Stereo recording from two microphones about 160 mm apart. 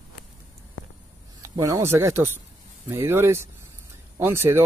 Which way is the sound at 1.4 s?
20° right (ahead or behind).